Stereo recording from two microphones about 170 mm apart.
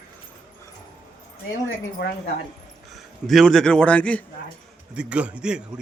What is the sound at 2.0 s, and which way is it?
Speech, 90° left.